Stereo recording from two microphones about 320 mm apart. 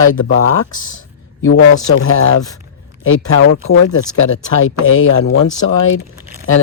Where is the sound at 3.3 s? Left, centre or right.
Left.